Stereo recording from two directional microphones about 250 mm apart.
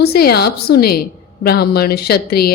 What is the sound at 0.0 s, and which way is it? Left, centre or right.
A woman's voice, left.